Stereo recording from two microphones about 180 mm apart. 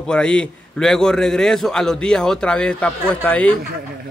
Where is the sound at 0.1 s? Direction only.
5° left (ahead or behind).